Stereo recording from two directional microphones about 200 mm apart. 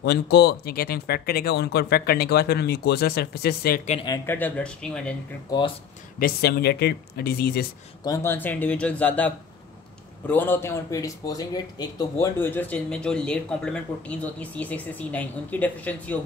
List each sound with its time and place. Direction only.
0.0 s speech: 55° left (ahead or behind)
4.0 s a man's voice: 20° left (ahead or behind)
4.4 s speech: 5° left (ahead or behind)
6.1 s speech: 50° left (ahead or behind)
8.0 s speech: 15° left (ahead or behind)